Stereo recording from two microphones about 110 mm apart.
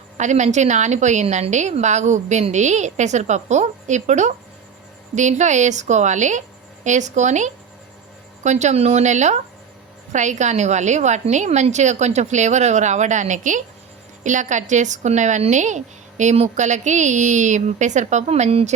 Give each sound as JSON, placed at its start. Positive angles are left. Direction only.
{"t": 0.2, "sound": "a woman's voice", "side_deg": -90}